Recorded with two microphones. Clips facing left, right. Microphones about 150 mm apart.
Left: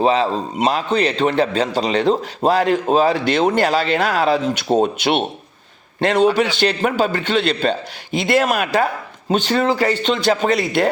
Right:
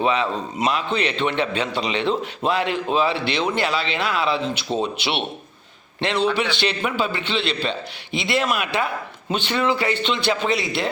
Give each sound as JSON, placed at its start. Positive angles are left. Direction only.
{"t": 0.0, "sound": "a man's voice", "side_deg": 35}